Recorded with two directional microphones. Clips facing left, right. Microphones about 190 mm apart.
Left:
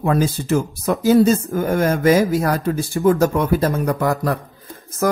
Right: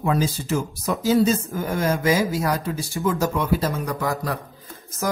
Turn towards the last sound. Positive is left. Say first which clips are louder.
# left 6 dB
turn(degrees=55)  # may be behind; listen again after turning